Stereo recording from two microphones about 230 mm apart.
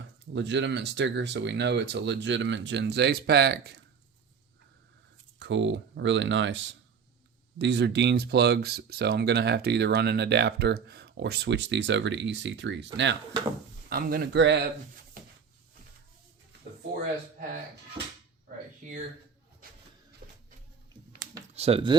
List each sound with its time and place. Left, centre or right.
0.0 s speech: right
5.4 s speech: right
21.5 s speech: right